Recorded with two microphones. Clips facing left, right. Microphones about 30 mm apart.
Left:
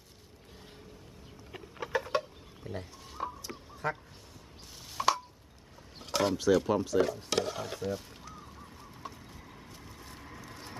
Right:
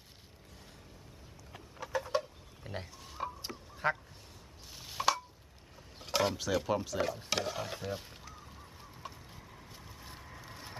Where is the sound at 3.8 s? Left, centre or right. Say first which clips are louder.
Right 2 dB; right.